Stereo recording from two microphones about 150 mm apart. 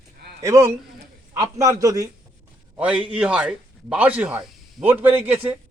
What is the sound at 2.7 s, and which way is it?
Speech, 10° right (ahead or behind).